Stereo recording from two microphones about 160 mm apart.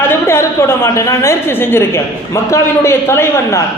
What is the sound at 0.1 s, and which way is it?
A woman's voice, 15° left (ahead or behind).